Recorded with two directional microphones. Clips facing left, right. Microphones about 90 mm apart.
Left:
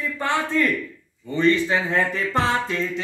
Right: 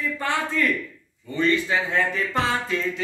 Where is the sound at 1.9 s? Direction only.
35° left (ahead or behind).